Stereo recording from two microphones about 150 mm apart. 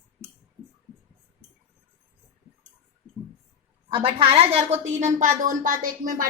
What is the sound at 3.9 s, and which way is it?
A woman's voice, 40° right (ahead or behind).